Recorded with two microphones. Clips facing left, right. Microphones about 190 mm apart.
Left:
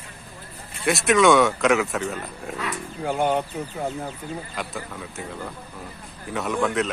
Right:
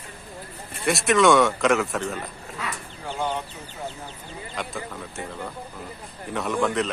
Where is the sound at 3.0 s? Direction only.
55° left (ahead or behind).